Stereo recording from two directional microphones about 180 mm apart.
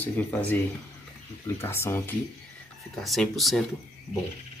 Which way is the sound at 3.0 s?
Centre (ahead or behind).